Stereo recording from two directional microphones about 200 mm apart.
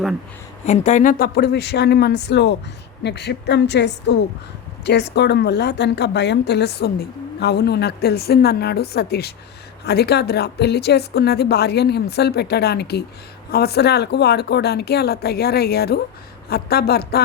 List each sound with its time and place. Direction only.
0.6 s a woman's voice: 35° left (ahead or behind); by 17.2 s 50° left (ahead or behind)